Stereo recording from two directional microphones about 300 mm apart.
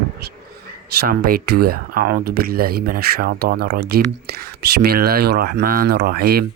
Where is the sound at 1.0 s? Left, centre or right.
Right.